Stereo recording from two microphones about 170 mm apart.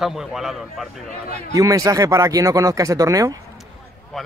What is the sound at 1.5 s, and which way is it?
Speech, 20° right (ahead or behind).